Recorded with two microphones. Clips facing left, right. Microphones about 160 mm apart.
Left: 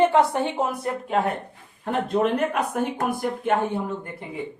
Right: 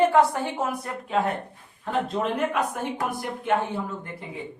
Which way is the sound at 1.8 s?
55° left (ahead or behind).